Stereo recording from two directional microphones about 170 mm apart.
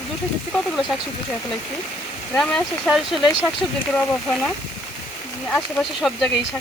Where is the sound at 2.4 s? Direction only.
5° left (ahead or behind).